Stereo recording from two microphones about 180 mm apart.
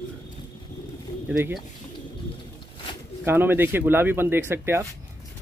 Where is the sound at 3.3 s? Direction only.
10° right (ahead or behind).